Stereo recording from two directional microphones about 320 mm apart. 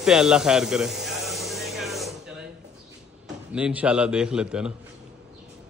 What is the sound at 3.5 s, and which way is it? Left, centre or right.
A man's voice, centre.